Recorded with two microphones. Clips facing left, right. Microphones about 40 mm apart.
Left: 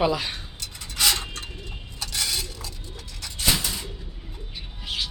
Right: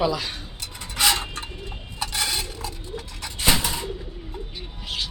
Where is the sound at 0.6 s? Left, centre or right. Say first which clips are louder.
Right 2 dB; centre.